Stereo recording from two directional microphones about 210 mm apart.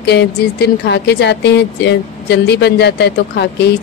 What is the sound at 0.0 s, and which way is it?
A woman's voice, 55° left (ahead or behind).